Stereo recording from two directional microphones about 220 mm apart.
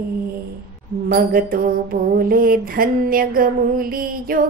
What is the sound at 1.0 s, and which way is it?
Music, 40° right (ahead or behind).